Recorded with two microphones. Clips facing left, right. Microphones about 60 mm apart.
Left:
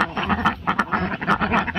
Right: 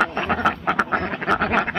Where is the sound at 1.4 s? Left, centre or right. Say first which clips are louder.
Even; right.